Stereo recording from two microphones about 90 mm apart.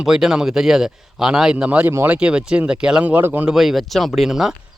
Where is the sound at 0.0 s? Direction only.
5° right (ahead or behind); by 3.5 s 20° right (ahead or behind).